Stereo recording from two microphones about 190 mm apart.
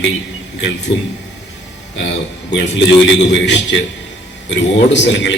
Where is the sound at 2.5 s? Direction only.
65° left (ahead or behind).